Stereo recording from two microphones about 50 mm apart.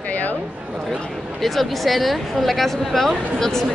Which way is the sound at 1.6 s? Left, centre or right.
Centre.